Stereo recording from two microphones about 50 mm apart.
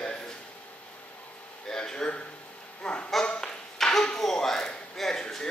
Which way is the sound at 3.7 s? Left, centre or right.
Centre.